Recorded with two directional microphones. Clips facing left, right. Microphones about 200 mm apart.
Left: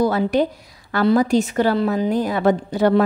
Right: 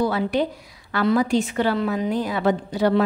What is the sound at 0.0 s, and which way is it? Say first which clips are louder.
A woman's voice: left 4 dB; 45° left (ahead or behind).